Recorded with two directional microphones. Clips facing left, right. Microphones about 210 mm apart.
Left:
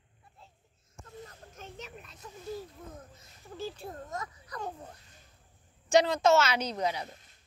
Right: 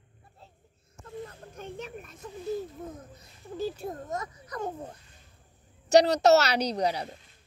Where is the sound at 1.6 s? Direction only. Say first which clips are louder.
Right 7 dB; 55° right (ahead or behind).